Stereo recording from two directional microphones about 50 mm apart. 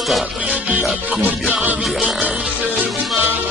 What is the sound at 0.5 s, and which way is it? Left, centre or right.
Music, right.